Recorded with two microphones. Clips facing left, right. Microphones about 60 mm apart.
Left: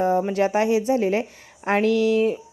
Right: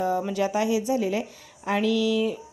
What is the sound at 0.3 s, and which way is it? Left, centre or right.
A woman's voice, left.